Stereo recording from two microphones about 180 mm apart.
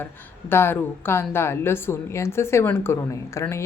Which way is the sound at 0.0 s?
10° left (ahead or behind).